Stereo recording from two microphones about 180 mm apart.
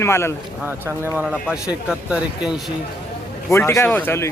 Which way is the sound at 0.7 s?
10° right (ahead or behind).